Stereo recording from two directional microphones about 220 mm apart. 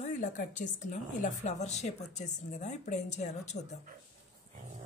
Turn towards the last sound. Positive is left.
turn(degrees=30)  # may be behind; listen again after turning